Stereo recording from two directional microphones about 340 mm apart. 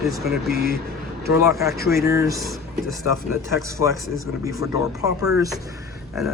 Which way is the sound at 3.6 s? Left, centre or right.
Centre.